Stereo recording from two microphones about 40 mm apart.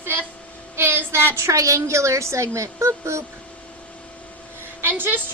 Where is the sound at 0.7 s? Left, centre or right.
Right.